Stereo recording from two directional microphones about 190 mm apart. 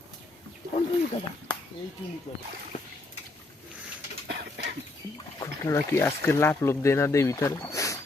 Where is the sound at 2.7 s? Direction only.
35° left (ahead or behind).